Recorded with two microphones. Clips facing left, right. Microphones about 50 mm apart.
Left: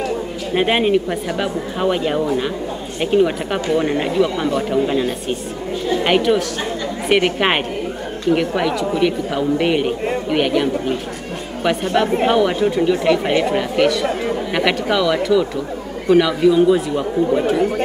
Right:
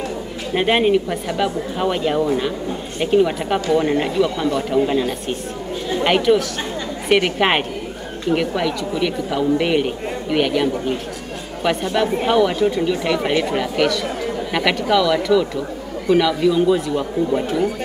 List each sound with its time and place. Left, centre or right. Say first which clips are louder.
0.6 s a woman's voice: even; centre
6.0 s a woman's voice: right 1 dB; centre
12.3 s speech: even; centre